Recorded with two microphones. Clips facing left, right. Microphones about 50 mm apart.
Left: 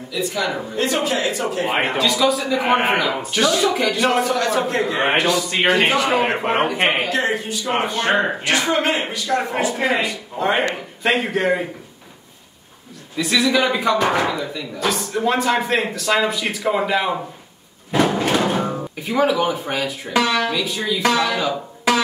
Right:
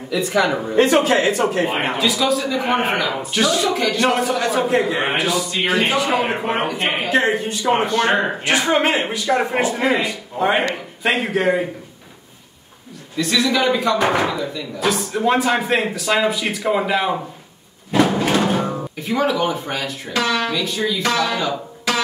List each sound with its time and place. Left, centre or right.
0.1 s speech: right
1.9 s speech: centre
2.1 s speech: centre
7.1 s a man's voice: right
7.8 s speech: centre
8.5 s speech: centre
9.6 s speech: right
10.0 s speech: centre
13.1 s speech: centre
18.1 s music: centre
20.1 s speech: centre
20.4 s speech: centre